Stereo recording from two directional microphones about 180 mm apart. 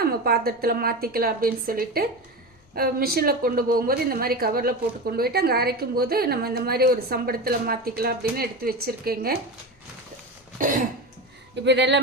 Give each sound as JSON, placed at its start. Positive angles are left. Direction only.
{"t": 0.0, "sound": "a woman's voice", "side_deg": -60}
{"t": 10.6, "sound": "cough", "side_deg": -45}
{"t": 11.5, "sound": "speech", "side_deg": -75}